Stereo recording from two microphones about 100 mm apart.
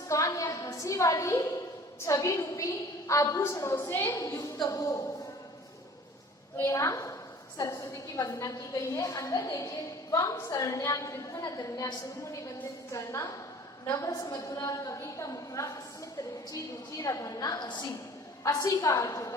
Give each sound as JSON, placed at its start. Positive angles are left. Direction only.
{"t": 0.1, "sound": "a sound", "side_deg": 35}
{"t": 1.1, "sound": "a woman's voice", "side_deg": 30}
{"t": 4.1, "sound": "a woman's voice", "side_deg": 35}
{"t": 6.6, "sound": "a woman's voice", "side_deg": 30}
{"t": 12.9, "sound": "a woman's voice", "side_deg": 30}
{"t": 17.0, "sound": "a woman's voice", "side_deg": 35}
{"t": 18.4, "sound": "a woman's voice", "side_deg": 35}